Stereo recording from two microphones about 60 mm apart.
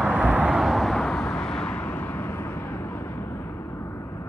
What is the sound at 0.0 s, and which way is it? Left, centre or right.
Vehicle, right.